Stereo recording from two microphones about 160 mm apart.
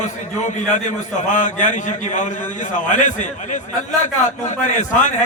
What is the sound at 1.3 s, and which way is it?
A man's voice, 50° left (ahead or behind).